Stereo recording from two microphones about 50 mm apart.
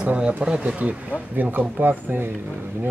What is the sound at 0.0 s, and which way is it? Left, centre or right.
Speech, right.